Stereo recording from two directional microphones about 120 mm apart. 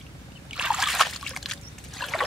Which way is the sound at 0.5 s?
5° right (ahead or behind).